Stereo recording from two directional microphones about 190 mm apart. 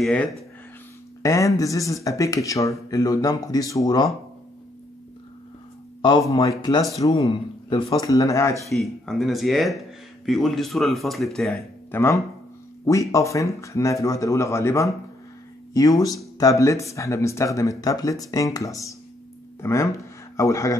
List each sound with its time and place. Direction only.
0.0 s speech: 5° left (ahead or behind)
1.2 s speech: 15° left (ahead or behind)
6.0 s a man's voice: 20° left (ahead or behind)
8.6 s speech: centre (ahead or behind); by 20.7 s 15° left (ahead or behind)